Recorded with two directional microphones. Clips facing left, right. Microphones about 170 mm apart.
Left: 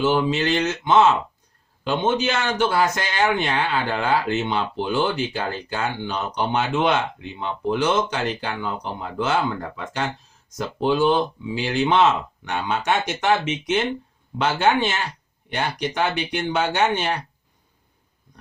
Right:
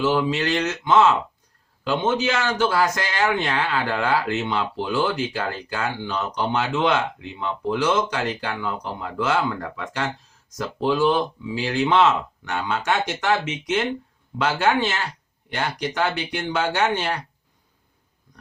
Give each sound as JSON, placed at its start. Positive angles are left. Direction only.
{"t": 0.0, "sound": "a man's voice", "side_deg": 20}